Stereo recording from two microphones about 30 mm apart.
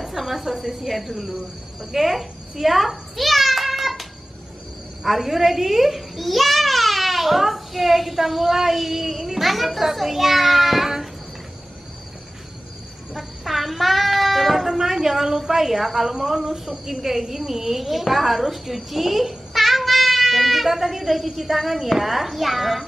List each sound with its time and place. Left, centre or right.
0.0 s cricket: centre
5.0 s a child's voice: centre
13.1 s sheep: centre
14.7 s a woman's voice: centre